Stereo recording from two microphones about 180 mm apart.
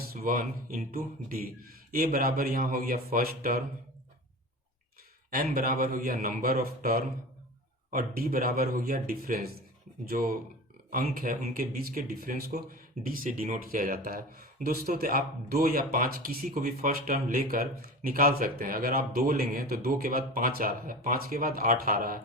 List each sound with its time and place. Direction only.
0.1 s speech: 55° right (ahead or behind)
5.5 s speech: 55° right (ahead or behind)